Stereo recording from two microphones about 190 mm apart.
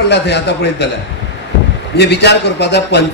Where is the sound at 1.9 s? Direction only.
60° left (ahead or behind).